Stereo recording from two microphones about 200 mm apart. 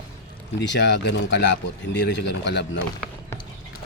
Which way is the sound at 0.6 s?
60° left (ahead or behind).